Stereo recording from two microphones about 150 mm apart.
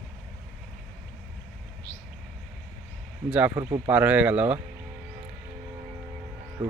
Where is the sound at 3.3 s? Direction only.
10° right (ahead or behind).